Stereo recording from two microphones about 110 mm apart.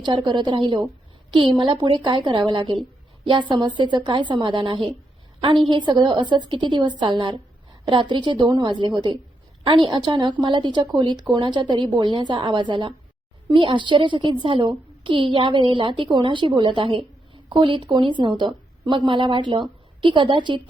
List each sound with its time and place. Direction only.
0.0 s a woman's voice: 45° right (ahead or behind)